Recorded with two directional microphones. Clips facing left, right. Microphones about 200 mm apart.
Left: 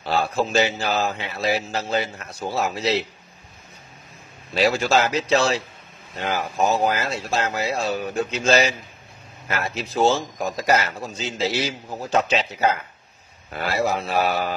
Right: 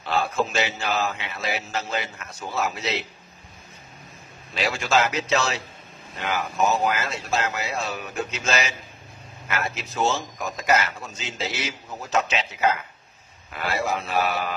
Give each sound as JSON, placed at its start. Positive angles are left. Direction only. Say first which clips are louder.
{"t": 0.0, "sound": "a man's voice", "louder": "left 2 dB", "side_deg": 35}
{"t": 4.6, "sound": "a man's voice", "louder": "left 4 dB", "side_deg": 35}